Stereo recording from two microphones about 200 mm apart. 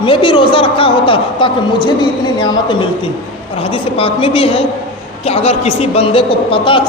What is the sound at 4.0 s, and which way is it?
A woman's voice, 30° left (ahead or behind).